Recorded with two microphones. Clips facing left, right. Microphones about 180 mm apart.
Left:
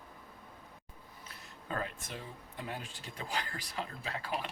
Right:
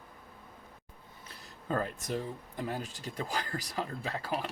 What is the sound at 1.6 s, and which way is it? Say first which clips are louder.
Speech: right 6 dB; 40° right (ahead or behind).